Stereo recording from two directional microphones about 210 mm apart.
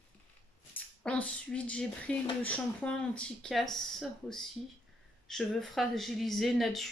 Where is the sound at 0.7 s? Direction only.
5° left (ahead or behind).